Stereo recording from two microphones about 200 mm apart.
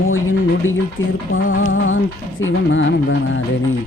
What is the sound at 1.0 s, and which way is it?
Music, 75° left (ahead or behind).